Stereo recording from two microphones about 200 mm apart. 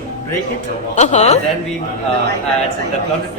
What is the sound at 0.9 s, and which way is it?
Speech, 35° left (ahead or behind).